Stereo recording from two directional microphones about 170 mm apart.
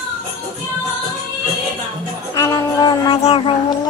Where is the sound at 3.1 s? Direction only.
30° left (ahead or behind).